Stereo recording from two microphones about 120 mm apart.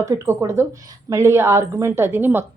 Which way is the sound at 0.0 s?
20° right (ahead or behind).